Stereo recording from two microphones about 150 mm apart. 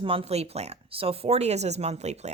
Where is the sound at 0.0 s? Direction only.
35° right (ahead or behind).